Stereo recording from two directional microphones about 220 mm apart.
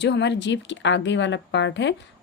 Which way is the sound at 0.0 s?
50° left (ahead or behind).